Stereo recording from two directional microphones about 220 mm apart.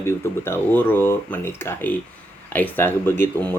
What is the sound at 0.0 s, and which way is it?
Speech, 10° left (ahead or behind).